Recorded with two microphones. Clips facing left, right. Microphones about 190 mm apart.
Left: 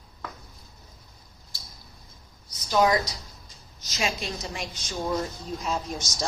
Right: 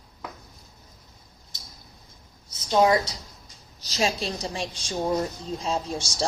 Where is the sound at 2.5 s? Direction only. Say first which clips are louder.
Right 2 dB; 25° right (ahead or behind).